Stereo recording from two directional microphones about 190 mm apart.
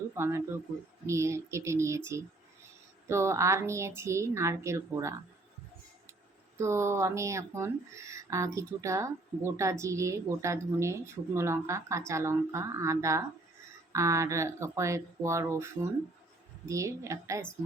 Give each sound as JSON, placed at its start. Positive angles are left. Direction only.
{"t": 0.1, "sound": "speech", "side_deg": -15}
{"t": 3.1, "sound": "speech", "side_deg": -15}
{"t": 6.6, "sound": "speech", "side_deg": -15}